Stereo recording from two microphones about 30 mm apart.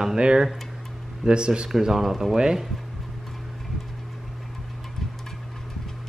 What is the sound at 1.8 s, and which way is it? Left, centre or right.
Speech, centre.